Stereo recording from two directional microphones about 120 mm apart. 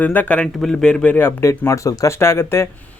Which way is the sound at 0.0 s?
15° left (ahead or behind).